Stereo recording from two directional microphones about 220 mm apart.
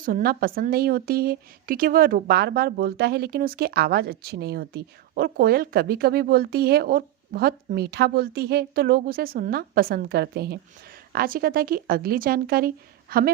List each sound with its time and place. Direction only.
0.0 s a woman's voice: 40° right (ahead or behind)